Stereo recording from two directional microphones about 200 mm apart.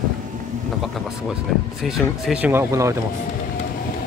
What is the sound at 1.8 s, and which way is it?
Speech, centre (ahead or behind).